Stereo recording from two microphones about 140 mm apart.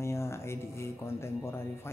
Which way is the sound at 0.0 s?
20° left (ahead or behind).